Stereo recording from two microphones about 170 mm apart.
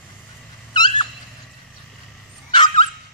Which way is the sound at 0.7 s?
25° left (ahead or behind).